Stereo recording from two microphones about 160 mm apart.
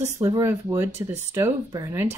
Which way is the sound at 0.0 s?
20° right (ahead or behind).